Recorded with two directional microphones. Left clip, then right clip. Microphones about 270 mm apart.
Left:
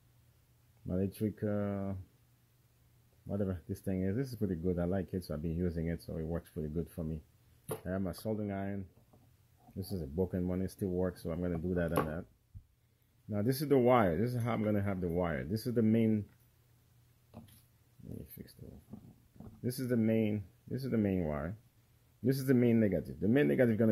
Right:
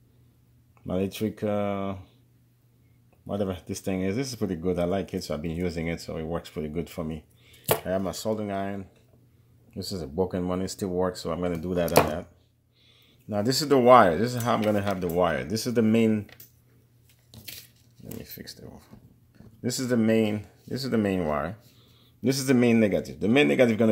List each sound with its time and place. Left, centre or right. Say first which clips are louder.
0.8 s speech: right 8 dB; left
3.3 s speech: right 9 dB; left
9.8 s speech: right 8 dB; left
13.3 s speech: right 8 dB; left
18.3 s speech: right 13 dB; left
19.6 s speech: right 8 dB; left